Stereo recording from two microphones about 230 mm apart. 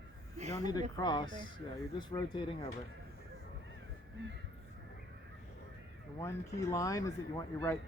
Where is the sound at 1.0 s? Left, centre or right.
Centre.